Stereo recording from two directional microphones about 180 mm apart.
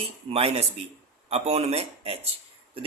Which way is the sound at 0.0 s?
30° right (ahead or behind).